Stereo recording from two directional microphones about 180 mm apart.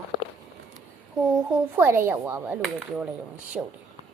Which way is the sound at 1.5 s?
10° right (ahead or behind).